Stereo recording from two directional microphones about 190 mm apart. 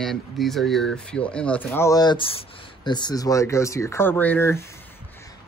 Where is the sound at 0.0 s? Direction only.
Centre (ahead or behind).